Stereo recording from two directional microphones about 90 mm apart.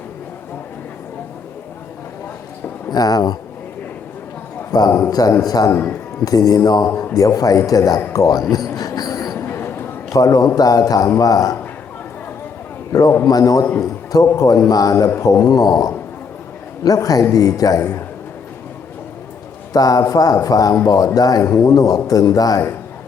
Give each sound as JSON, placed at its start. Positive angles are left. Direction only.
{"t": 2.9, "sound": "a man's voice", "side_deg": 45}
{"t": 4.7, "sound": "a man's voice", "side_deg": 40}
{"t": 5.7, "sound": "speech", "side_deg": 20}
{"t": 6.2, "sound": "a man's voice", "side_deg": 45}
{"t": 8.1, "sound": "a sound", "side_deg": 40}
{"t": 9.4, "sound": "a sound", "side_deg": 25}
{"t": 10.1, "sound": "a man's voice", "side_deg": 40}
{"t": 12.9, "sound": "a man's voice", "side_deg": 40}
{"t": 19.7, "sound": "a man's voice", "side_deg": 45}
{"t": 21.4, "sound": "a man's voice", "side_deg": 30}